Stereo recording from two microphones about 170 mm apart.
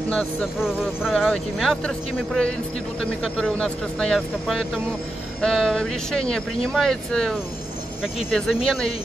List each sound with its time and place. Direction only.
0.1 s speech: centre (ahead or behind)